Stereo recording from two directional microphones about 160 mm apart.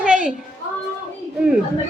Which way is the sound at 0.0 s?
5° right (ahead or behind).